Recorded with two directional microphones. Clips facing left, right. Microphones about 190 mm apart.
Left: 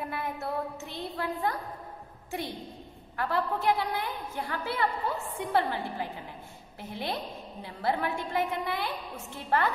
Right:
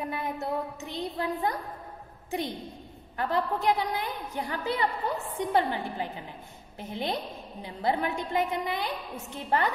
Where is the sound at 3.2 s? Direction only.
20° right (ahead or behind).